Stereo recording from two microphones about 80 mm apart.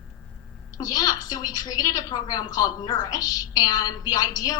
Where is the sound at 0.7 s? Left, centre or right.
Left.